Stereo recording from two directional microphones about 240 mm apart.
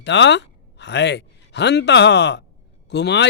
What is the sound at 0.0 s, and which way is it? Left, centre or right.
Speech, left.